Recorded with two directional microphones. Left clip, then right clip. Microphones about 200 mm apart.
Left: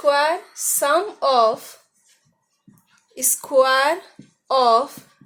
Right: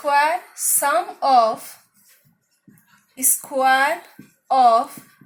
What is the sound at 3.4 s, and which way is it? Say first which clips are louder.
Speech: left 1 dB; 55° left (ahead or behind).